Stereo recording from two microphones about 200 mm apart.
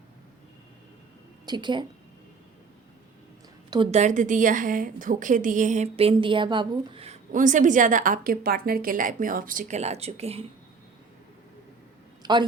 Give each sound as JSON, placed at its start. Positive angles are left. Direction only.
{"t": 1.5, "sound": "a woman's voice", "side_deg": -20}
{"t": 3.9, "sound": "a woman's voice", "side_deg": -40}
{"t": 12.2, "sound": "a man's voice", "side_deg": -20}